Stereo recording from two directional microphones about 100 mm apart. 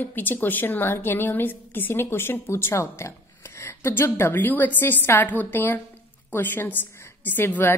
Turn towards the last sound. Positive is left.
turn(degrees=20)  # may be behind; listen again after turning